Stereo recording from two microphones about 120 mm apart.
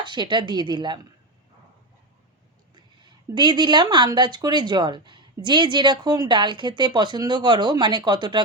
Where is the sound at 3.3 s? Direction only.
40° right (ahead or behind).